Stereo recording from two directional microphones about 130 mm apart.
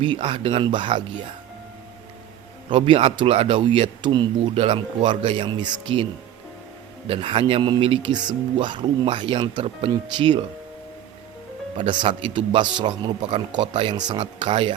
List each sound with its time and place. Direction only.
0.0 s speech: 40° right (ahead or behind)
2.6 s speech: 45° right (ahead or behind)
7.1 s speech: 40° right (ahead or behind)
11.8 s speech: 40° right (ahead or behind)